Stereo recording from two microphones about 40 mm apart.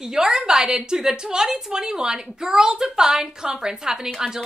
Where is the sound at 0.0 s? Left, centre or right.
Centre.